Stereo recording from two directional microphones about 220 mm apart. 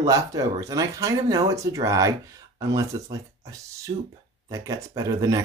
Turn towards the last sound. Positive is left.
turn(degrees=-15)  # may be behind; listen again after turning